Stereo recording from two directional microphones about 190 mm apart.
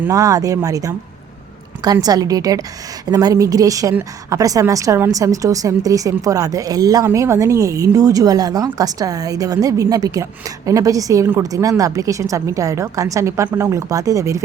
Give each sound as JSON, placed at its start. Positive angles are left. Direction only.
{"t": 0.0, "sound": "a woman's voice", "side_deg": -20}